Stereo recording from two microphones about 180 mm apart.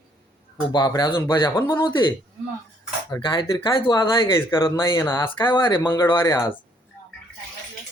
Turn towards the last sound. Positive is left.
turn(degrees=20)  # may be behind; listen again after turning